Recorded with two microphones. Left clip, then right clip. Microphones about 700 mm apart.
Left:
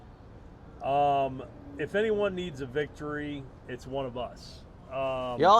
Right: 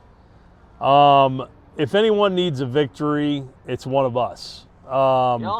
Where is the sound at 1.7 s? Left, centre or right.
Right.